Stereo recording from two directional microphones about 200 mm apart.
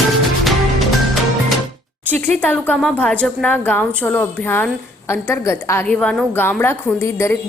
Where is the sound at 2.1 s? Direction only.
10° left (ahead or behind).